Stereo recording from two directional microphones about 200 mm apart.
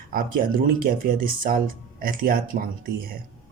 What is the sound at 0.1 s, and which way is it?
Speech, 45° right (ahead or behind).